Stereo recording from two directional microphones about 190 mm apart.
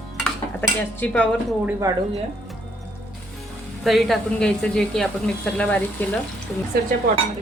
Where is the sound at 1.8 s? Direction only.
20° right (ahead or behind).